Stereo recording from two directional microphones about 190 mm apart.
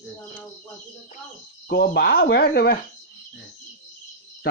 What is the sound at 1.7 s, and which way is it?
Speech, 55° left (ahead or behind).